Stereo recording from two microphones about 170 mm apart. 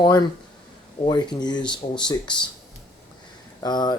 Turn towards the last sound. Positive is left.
turn(degrees=25)  # may be behind; listen again after turning